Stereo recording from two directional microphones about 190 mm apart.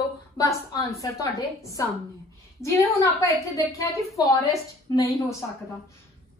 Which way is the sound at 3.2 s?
15° left (ahead or behind).